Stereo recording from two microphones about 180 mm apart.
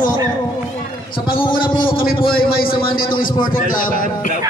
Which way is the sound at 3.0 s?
50° left (ahead or behind).